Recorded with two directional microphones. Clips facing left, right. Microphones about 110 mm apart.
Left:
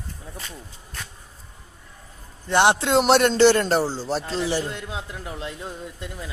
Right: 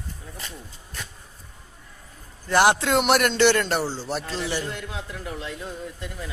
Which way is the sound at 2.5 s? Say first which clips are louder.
Left 1 dB; 25° left (ahead or behind).